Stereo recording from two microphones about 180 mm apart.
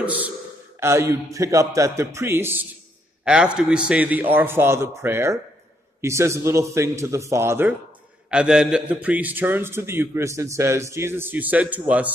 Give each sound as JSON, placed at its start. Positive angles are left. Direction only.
{"t": 0.0, "sound": "a man's voice", "side_deg": -10}